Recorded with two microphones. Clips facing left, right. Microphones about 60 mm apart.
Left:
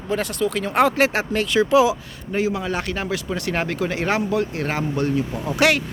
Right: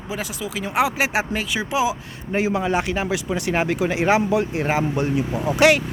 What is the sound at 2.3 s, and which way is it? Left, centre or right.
Speech, right.